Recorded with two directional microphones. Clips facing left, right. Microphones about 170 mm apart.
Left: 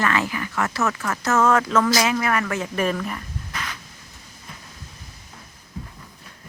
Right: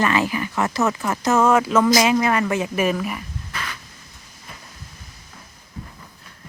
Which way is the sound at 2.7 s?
10° right (ahead or behind).